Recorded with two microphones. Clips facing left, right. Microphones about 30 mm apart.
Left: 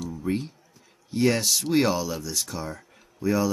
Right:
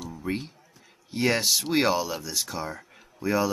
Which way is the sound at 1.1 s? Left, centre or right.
Centre.